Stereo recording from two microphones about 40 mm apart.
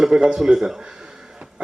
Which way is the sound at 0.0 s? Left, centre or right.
Centre.